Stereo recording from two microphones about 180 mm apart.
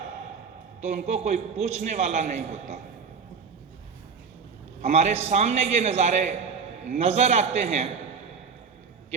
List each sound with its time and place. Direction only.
0.8 s a man's voice: 40° right (ahead or behind)
4.8 s a man's voice: 35° right (ahead or behind)